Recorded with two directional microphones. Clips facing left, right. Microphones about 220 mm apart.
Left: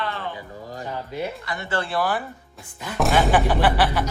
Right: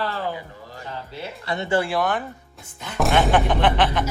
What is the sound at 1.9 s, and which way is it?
Speech, 5° left (ahead or behind).